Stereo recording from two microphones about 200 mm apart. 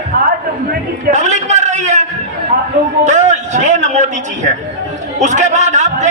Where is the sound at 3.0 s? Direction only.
35° right (ahead or behind).